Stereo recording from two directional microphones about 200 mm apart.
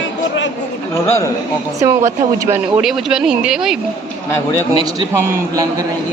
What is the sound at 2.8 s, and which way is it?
Speech, centre (ahead or behind).